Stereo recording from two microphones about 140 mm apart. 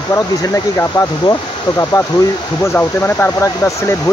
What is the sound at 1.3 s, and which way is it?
Speech, 20° left (ahead or behind).